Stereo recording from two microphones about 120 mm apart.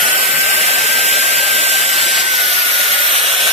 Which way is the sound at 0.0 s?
Centre (ahead or behind).